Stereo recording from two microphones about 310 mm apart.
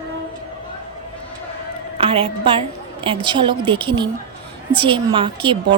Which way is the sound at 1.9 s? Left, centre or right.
Centre.